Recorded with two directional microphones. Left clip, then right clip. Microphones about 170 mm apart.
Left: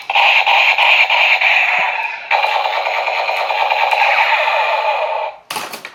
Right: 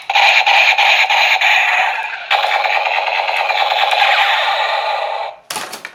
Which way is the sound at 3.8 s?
20° right (ahead or behind).